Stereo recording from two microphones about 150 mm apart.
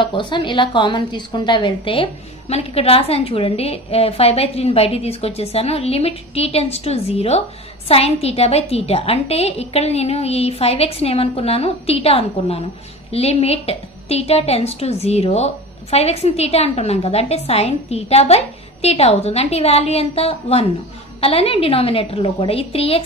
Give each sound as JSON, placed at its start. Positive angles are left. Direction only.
{"t": 0.0, "sound": "a woman's voice", "side_deg": 30}